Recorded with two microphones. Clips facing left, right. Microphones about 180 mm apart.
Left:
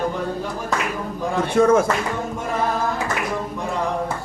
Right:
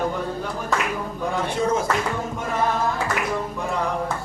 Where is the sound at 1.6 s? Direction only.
60° left (ahead or behind).